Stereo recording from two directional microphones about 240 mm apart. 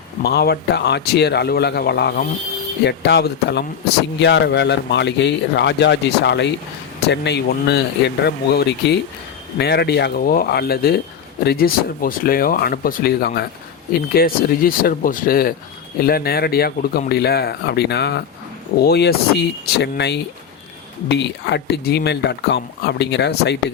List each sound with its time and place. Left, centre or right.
0.2 s speech: left